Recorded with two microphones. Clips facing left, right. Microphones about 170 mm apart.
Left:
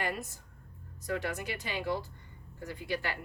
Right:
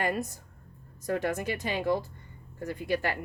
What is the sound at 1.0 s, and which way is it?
Speech, 45° right (ahead or behind).